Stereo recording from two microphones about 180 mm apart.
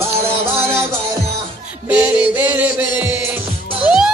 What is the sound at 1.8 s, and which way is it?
Music, 10° right (ahead or behind).